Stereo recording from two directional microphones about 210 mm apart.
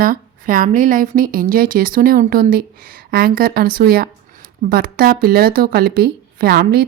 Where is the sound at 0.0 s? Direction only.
40° right (ahead or behind).